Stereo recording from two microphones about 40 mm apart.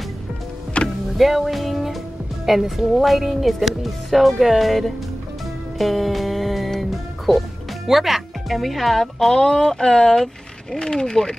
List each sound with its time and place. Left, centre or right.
0.8 s music: centre
2.4 s a woman's voice: centre
5.8 s music: centre
9.3 s speech: centre
10.8 s speech: centre